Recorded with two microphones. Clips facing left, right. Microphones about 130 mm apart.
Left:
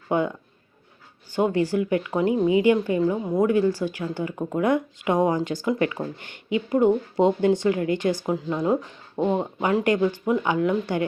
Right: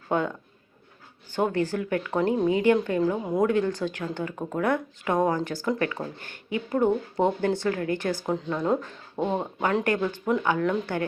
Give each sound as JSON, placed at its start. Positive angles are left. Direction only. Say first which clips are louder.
{"t": 0.1, "sound": "speech", "louder": "left 3 dB", "side_deg": 15}